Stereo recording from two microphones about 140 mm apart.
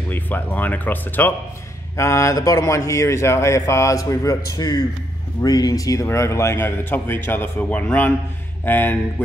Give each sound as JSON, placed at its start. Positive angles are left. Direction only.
{"t": 0.1, "sound": "speech", "side_deg": 15}